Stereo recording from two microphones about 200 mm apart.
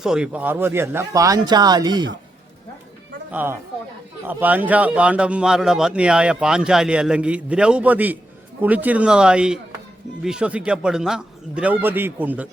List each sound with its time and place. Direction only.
0.0 s speech: 5° right (ahead or behind); by 2.1 s 20° right (ahead or behind)
3.3 s a man's voice: 10° right (ahead or behind)